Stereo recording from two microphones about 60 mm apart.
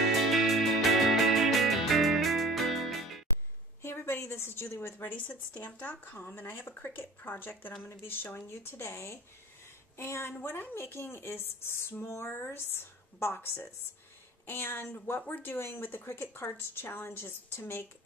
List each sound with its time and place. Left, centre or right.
0.1 s music: centre
3.8 s a sound: left
5.2 s a woman's voice: left